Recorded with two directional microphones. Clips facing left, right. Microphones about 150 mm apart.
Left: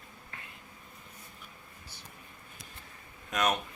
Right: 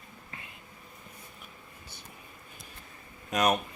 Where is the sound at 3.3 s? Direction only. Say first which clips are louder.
Right 3 dB; 30° right (ahead or behind).